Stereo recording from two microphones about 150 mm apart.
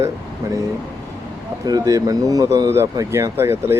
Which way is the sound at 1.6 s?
25° right (ahead or behind).